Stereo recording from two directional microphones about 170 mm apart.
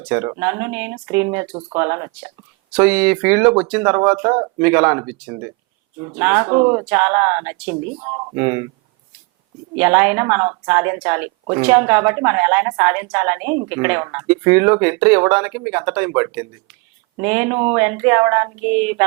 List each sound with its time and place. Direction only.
0.1 s a woman's voice: 15° right (ahead or behind)
7.9 s speech: 25° right (ahead or behind)
8.4 s a woman's voice: 15° right (ahead or behind)
9.7 s a woman's voice: 10° right (ahead or behind)